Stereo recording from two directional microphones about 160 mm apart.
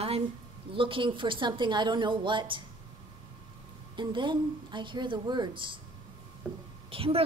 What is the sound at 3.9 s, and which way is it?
A woman's voice, 30° right (ahead or behind).